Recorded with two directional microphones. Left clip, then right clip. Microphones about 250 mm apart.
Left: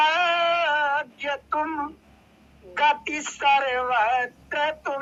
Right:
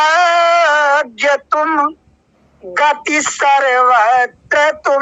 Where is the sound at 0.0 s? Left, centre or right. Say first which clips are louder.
Right 10 dB; right.